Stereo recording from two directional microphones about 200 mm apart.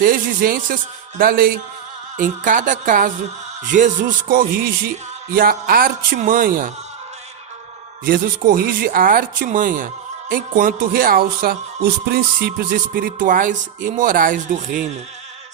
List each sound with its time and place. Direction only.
0.0 s a woman's voice: 45° right (ahead or behind)
8.0 s speech: 45° right (ahead or behind)